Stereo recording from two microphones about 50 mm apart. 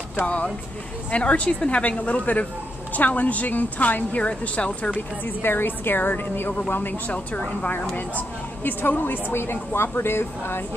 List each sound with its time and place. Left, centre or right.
1.1 s a woman's voice: left
5.2 s a woman's voice: left
7.1 s a woman's voice: left
8.6 s a woman's voice: left